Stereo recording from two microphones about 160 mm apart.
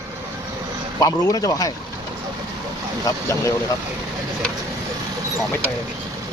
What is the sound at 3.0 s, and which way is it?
Speech, 20° left (ahead or behind).